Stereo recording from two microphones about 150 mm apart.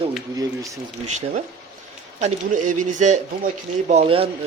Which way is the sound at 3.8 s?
40° right (ahead or behind).